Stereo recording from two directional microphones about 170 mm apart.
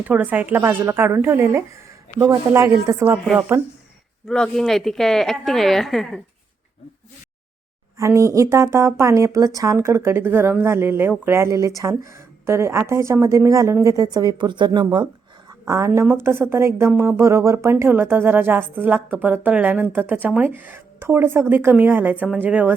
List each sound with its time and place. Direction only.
0.0 s speech: 10° right (ahead or behind)
4.3 s a woman's voice: 5° left (ahead or behind)
7.9 s a woman's voice: 15° right (ahead or behind)